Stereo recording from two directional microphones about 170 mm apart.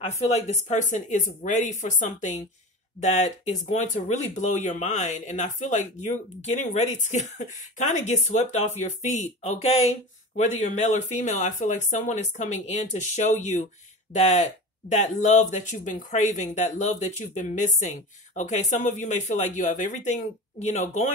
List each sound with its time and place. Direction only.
0.0 s speech: 40° left (ahead or behind)